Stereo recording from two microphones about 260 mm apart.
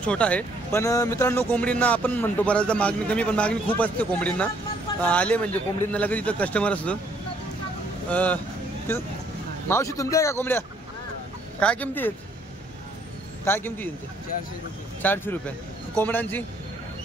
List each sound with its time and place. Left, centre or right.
0.0 s a man's voice: centre
8.1 s a man's voice: centre
9.7 s a man's voice: centre
11.6 s a man's voice: centre
13.5 s a man's voice: centre
15.0 s a man's voice: centre